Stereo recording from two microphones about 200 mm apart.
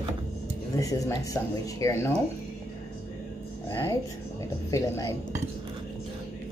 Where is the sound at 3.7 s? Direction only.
10° left (ahead or behind).